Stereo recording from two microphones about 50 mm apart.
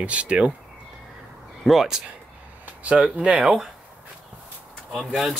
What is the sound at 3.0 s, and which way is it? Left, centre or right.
Speech, centre.